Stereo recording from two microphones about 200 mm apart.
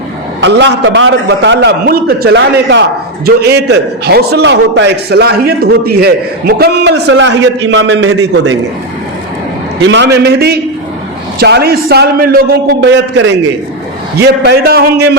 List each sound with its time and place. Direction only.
0.4 s a man's voice: 65° right (ahead or behind)
9.8 s a man's voice: 65° right (ahead or behind)
14.2 s a man's voice: 50° right (ahead or behind)